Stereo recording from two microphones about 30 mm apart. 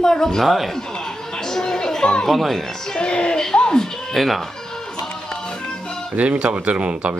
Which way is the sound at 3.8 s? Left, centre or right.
Centre.